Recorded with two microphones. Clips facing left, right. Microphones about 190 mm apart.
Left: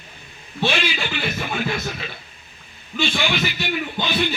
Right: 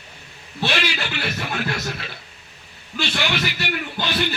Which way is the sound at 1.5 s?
5° left (ahead or behind).